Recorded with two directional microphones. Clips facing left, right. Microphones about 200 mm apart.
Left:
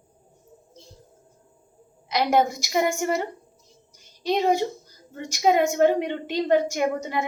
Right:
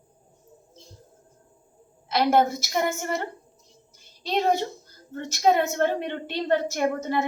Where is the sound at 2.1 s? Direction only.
15° left (ahead or behind).